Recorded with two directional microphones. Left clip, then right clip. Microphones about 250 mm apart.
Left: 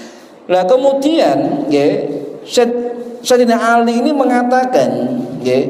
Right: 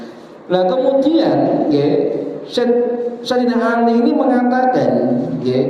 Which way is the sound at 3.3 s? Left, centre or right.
Left.